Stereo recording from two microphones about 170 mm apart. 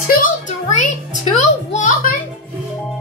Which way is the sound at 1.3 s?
45° left (ahead or behind).